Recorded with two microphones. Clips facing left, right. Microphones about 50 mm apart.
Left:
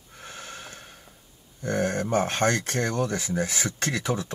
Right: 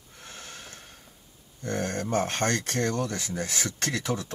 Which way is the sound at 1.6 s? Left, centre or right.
Centre.